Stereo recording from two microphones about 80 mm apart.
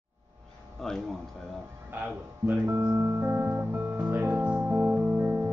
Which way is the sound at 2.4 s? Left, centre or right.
Right.